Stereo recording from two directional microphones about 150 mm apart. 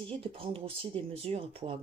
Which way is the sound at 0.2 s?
40° right (ahead or behind).